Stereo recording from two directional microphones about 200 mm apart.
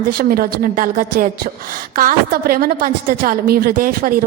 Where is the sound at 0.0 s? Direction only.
45° right (ahead or behind).